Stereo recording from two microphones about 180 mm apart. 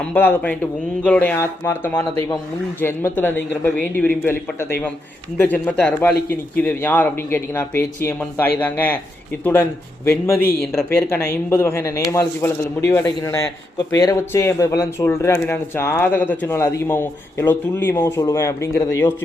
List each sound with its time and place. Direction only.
0.0 s speech: 10° left (ahead or behind)